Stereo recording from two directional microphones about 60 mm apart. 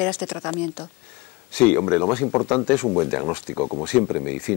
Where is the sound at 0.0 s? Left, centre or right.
Left.